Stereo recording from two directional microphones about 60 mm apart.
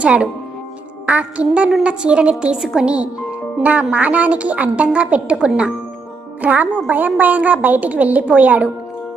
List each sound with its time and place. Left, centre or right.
0.0 s a woman's voice: centre